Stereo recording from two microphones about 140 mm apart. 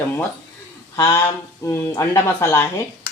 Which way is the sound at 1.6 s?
20° left (ahead or behind).